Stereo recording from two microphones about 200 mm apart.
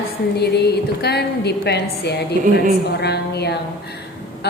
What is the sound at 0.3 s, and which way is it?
A woman's voice, 55° left (ahead or behind).